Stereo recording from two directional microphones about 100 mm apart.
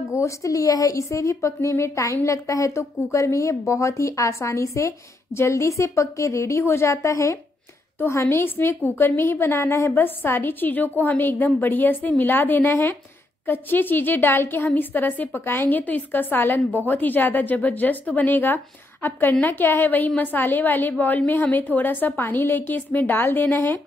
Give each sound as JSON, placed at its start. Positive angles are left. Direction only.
{"t": 0.1, "sound": "a woman's voice", "side_deg": 30}